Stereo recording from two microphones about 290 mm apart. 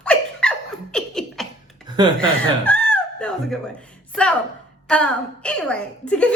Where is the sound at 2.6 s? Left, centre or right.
Centre.